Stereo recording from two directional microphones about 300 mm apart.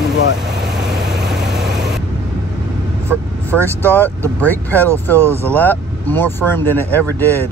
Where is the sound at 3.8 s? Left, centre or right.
Centre.